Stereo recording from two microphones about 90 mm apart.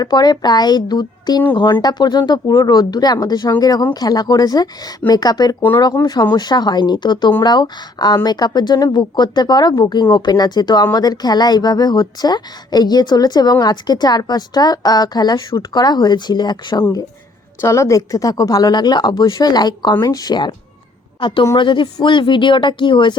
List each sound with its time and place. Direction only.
0.0 s a woman's voice: 50° left (ahead or behind)
17.6 s a woman's voice: 35° left (ahead or behind); by 20.5 s 50° left (ahead or behind)
21.2 s a woman's voice: 65° left (ahead or behind)